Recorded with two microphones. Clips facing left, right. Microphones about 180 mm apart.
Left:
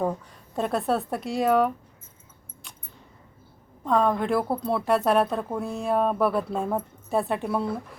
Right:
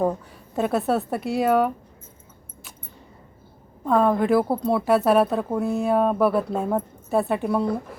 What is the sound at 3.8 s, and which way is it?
A woman's voice, 5° right (ahead or behind).